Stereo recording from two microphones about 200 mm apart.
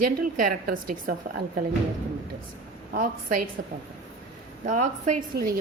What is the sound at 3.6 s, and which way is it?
Speech, 65° right (ahead or behind).